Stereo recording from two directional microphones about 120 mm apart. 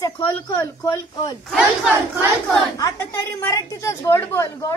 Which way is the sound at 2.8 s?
25° left (ahead or behind).